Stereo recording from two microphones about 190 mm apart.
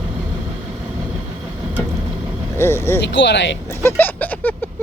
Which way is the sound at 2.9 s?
65° left (ahead or behind).